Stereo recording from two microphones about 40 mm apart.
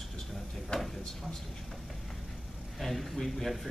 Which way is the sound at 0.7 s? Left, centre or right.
Left.